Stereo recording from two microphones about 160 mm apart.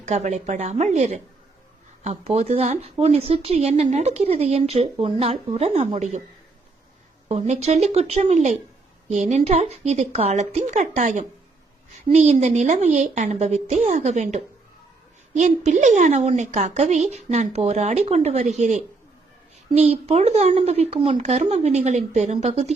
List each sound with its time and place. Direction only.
0.0 s a woman's voice: 45° right (ahead or behind)
7.3 s a woman's voice: 45° right (ahead or behind)